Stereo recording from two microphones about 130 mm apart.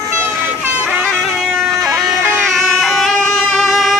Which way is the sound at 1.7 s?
20° right (ahead or behind).